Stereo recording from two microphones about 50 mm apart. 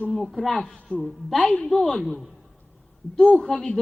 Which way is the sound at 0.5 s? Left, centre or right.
Centre.